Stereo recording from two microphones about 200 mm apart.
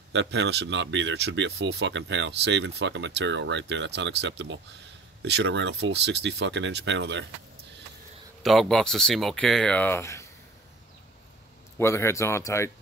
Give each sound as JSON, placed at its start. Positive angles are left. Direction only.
{"t": 0.1, "sound": "speech", "side_deg": -65}
{"t": 8.4, "sound": "speech", "side_deg": 0}
{"t": 11.8, "sound": "speech", "side_deg": 15}